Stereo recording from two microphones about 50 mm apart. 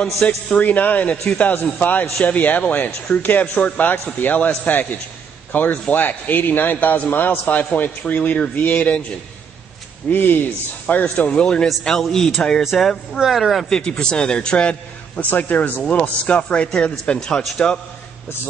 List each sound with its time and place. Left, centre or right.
0.0 s a man's voice: centre
0.6 s a man's voice: left
3.9 s a man's voice: left
10.0 s a man's voice: left
11.6 s a man's voice: centre
13.1 s speech: centre
13.7 s a man's voice: centre
15.1 s a man's voice: left
15.9 s speech: left